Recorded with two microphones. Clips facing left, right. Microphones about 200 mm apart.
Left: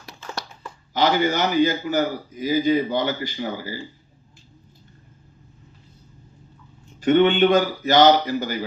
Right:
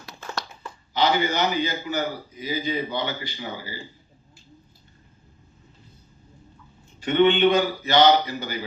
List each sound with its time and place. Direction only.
0.9 s a man's voice: 45° left (ahead or behind)
7.0 s a man's voice: 45° left (ahead or behind)